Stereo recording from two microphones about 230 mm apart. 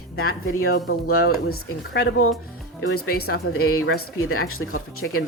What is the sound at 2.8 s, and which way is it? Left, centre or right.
Speech, left.